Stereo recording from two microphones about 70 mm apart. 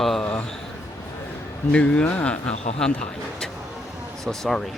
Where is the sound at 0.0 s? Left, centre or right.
Centre.